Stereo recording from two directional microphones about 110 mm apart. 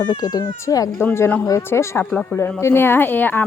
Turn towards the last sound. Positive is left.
turn(degrees=15)  # may be behind; listen again after turning